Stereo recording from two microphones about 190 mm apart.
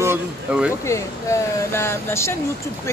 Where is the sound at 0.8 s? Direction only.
15° left (ahead or behind).